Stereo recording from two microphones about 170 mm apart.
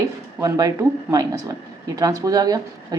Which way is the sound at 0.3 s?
20° right (ahead or behind).